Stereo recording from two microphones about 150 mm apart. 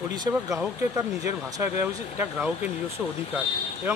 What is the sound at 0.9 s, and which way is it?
Speech, 20° right (ahead or behind).